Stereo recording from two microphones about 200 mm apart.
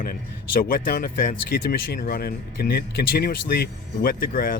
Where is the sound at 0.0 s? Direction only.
45° left (ahead or behind).